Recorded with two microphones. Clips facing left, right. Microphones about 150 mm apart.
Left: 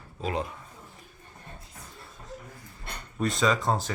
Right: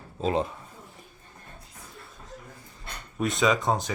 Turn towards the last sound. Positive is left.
turn(degrees=-5)  # may be behind; listen again after turning